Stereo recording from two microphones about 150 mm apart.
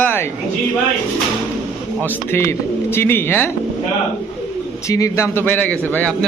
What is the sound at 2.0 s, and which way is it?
Speech, 15° left (ahead or behind).